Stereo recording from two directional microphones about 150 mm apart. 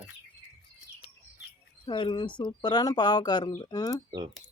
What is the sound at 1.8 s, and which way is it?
Speech, 35° left (ahead or behind).